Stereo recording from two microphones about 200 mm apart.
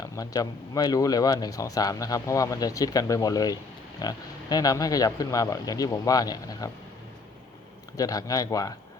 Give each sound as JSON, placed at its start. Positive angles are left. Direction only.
{"t": 0.0, "sound": "speech", "side_deg": 15}
{"t": 7.9, "sound": "speech", "side_deg": 20}